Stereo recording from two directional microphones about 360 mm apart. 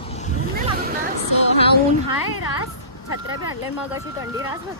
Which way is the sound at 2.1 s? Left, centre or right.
Centre.